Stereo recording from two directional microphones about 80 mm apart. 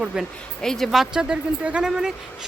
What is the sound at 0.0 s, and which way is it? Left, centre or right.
Speech, centre.